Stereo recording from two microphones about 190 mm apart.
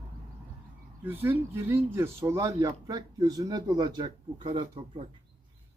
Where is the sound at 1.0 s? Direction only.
10° right (ahead or behind).